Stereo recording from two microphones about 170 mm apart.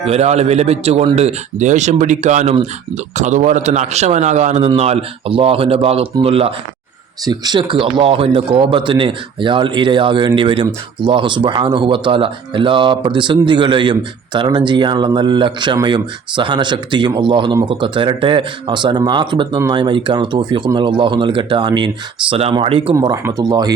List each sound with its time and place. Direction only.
0.0 s speech: 40° right (ahead or behind)
23.0 s speech: 20° right (ahead or behind)